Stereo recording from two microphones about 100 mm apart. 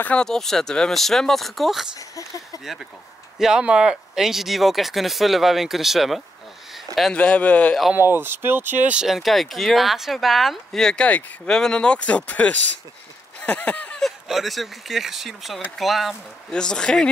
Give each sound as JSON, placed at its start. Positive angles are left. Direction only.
{"t": 0.0, "sound": "speech", "side_deg": 10}
{"t": 2.0, "sound": "speech", "side_deg": 35}
{"t": 2.6, "sound": "speech", "side_deg": 0}
{"t": 7.0, "sound": "speech", "side_deg": 10}
{"t": 7.9, "sound": "speech", "side_deg": -20}
{"t": 9.0, "sound": "speech", "side_deg": 0}